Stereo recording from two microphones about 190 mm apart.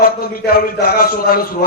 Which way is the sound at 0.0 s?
50° left (ahead or behind).